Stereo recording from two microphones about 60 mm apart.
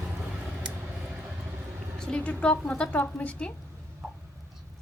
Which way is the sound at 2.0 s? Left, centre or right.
Centre.